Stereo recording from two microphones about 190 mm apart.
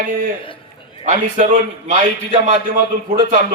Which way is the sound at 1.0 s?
40° right (ahead or behind).